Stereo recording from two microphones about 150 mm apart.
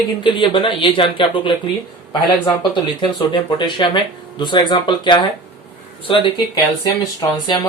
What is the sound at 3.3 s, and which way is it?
Speech, 30° left (ahead or behind).